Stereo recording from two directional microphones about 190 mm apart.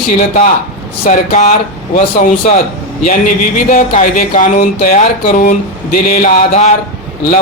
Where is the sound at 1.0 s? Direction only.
40° left (ahead or behind).